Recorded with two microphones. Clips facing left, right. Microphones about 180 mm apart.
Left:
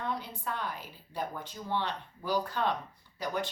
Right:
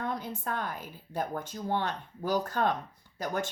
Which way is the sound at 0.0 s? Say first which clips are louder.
Right 2 dB; 45° right (ahead or behind).